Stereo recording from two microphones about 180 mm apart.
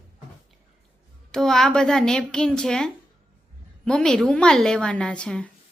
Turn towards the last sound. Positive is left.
turn(degrees=5)  # may be behind; listen again after turning